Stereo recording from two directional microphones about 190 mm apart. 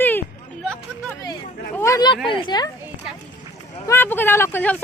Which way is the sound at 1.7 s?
15° left (ahead or behind).